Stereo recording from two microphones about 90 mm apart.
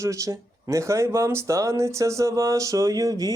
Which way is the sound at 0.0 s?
35° right (ahead or behind).